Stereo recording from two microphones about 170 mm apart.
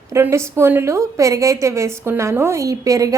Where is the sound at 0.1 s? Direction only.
15° right (ahead or behind).